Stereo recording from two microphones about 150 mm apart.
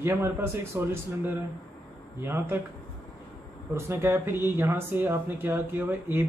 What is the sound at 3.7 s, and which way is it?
Speech, 15° right (ahead or behind).